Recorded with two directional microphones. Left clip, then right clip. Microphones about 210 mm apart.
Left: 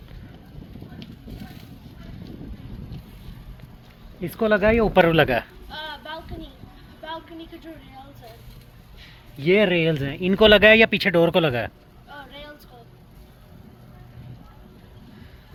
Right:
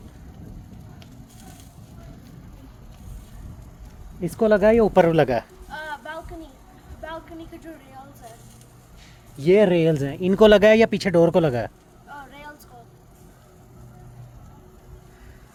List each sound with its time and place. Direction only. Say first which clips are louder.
4.2 s speech: right 2 dB; 20° right (ahead or behind)
5.7 s a sound: right 1 dB; 5° right (ahead or behind)
9.4 s speech: right 2 dB; 25° right (ahead or behind)
12.0 s boat: even; centre (ahead or behind)